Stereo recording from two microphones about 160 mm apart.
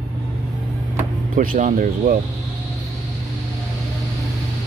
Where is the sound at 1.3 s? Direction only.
55° right (ahead or behind).